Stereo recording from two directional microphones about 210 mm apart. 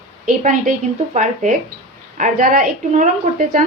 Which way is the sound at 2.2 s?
40° right (ahead or behind).